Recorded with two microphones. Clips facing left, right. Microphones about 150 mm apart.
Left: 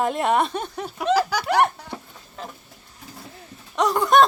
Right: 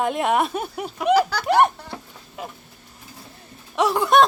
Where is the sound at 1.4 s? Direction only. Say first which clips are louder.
Right 3 dB; 20° right (ahead or behind).